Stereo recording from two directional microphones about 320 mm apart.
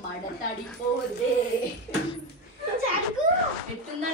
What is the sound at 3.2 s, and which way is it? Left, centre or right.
Speech, right.